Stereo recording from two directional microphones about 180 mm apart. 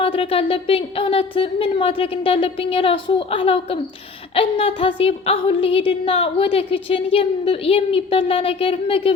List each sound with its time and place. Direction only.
0.0 s a woman's voice: 30° left (ahead or behind)